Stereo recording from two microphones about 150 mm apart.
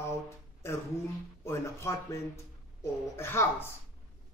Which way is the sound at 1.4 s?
20° left (ahead or behind).